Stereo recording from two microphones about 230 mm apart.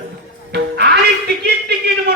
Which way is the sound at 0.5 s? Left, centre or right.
Right.